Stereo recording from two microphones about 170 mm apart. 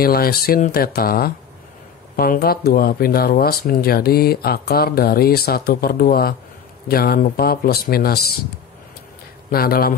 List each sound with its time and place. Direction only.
0.0 s speech: 60° left (ahead or behind)
9.5 s speech: 60° left (ahead or behind)